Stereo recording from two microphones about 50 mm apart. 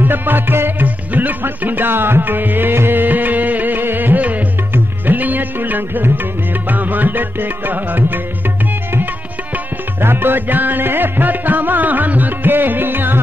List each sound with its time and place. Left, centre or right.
0.0 s music: right
10.0 s music: right